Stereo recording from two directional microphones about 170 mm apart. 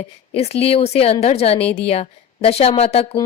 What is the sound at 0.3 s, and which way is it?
Speech, 35° left (ahead or behind).